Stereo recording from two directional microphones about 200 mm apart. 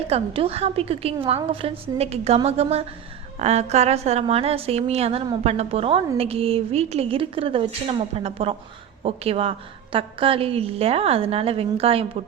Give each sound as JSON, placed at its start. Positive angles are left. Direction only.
{"t": 0.1, "sound": "a woman's voice", "side_deg": -30}